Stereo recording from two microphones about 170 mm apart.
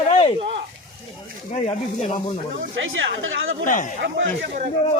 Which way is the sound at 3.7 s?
50° left (ahead or behind).